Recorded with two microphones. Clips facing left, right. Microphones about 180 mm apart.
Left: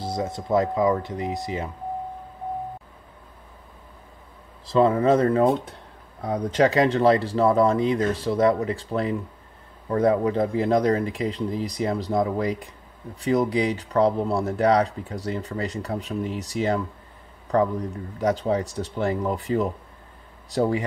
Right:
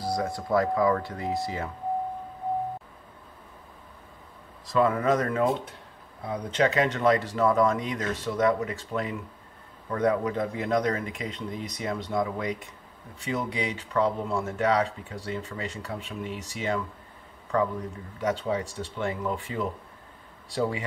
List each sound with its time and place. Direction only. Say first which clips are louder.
0.0 s speech: left 1 dB; 20° left (ahead or behind)
4.6 s speech: left 5 dB; 30° left (ahead or behind)
18.2 s speech: left 5 dB; 35° left (ahead or behind)